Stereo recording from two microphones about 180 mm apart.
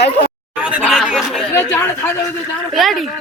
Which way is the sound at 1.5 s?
10° left (ahead or behind).